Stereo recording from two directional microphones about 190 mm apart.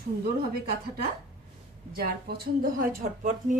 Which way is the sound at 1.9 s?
55° right (ahead or behind).